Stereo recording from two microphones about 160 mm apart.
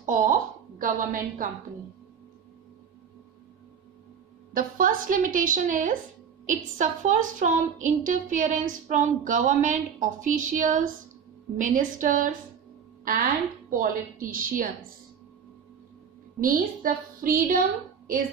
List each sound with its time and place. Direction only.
0.0 s a sound: 55° right (ahead or behind)
4.6 s a woman's voice: 55° right (ahead or behind)
16.3 s a woman's voice: 60° right (ahead or behind)